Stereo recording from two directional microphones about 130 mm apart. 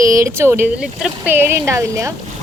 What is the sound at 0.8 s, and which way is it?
Speech, 5° right (ahead or behind).